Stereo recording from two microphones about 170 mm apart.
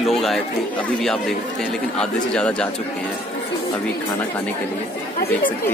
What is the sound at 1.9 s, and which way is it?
Speech, 5° left (ahead or behind).